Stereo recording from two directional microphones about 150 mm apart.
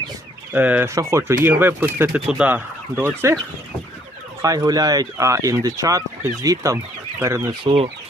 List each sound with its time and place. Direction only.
0.5 s speech: 10° right (ahead or behind)
4.4 s speech: 25° right (ahead or behind)